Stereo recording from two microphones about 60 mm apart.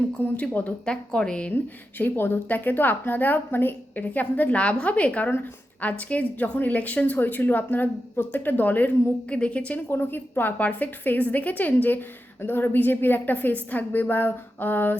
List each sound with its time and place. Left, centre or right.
0.2 s speech: left
0.9 s a woman's voice: centre
1.5 s a woman's voice: left
9.3 s speech: left
9.9 s a woman's voice: left